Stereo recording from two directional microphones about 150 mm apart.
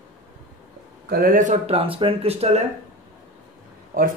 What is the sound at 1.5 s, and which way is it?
Speech, 40° right (ahead or behind).